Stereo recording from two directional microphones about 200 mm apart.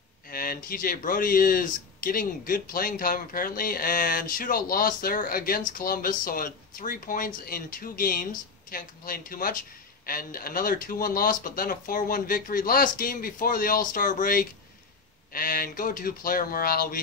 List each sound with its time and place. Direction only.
0.3 s speech: 45° left (ahead or behind)